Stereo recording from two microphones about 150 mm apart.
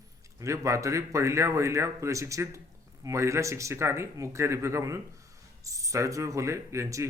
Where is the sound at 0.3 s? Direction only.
20° right (ahead or behind).